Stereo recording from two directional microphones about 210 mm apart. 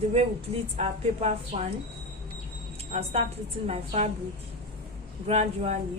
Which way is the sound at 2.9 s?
30° right (ahead or behind).